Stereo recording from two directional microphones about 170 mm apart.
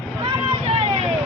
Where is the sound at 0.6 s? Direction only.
35° right (ahead or behind).